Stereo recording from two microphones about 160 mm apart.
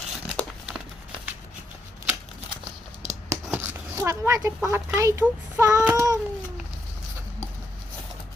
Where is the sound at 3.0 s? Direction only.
45° right (ahead or behind).